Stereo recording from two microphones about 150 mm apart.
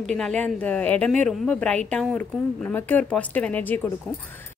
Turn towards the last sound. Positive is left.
turn(degrees=10)  # may be behind; listen again after turning